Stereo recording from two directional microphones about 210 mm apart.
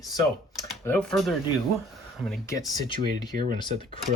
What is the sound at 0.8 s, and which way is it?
Speech, 5° left (ahead or behind).